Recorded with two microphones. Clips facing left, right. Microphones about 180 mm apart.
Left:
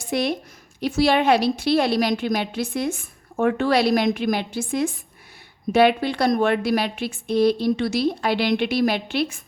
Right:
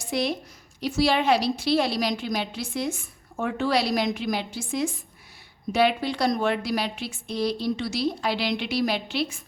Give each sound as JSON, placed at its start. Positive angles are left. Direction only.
{"t": 0.1, "sound": "a woman's voice", "side_deg": 55}